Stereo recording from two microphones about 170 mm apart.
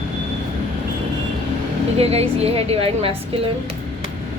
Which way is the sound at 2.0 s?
35° right (ahead or behind).